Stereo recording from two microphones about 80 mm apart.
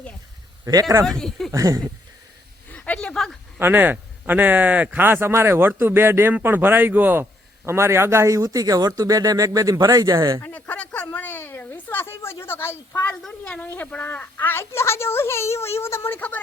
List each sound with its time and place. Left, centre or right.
0.6 s speech: right
1.2 s speech: centre
1.5 s speech: right
2.6 s speech: centre
3.6 s a man's voice: right
10.4 s a sound: centre; by 13.1 s left
13.2 s a woman's voice: centre